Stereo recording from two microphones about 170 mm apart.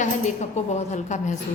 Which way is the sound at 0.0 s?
40° left (ahead or behind).